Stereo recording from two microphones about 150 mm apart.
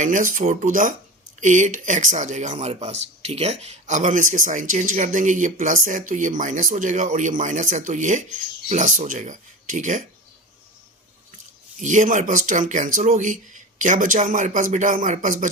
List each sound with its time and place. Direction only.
0.0 s speech: 60° right (ahead or behind)
11.8 s speech: 55° right (ahead or behind)